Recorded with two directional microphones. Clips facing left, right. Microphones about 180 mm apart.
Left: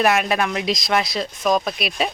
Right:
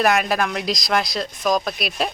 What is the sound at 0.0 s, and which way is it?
Speech, centre (ahead or behind).